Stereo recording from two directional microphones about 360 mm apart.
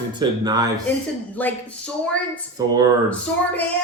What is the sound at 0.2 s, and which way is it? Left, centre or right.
Speech, centre.